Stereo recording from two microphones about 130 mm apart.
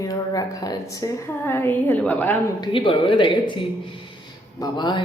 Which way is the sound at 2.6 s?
40° left (ahead or behind).